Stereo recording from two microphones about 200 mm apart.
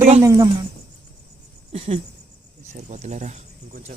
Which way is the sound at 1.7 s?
30° right (ahead or behind).